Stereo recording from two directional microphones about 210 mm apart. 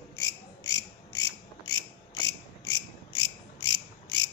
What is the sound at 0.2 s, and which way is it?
Cricket, 15° left (ahead or behind).